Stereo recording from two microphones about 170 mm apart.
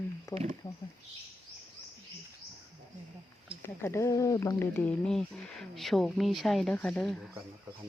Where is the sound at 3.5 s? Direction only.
35° right (ahead or behind).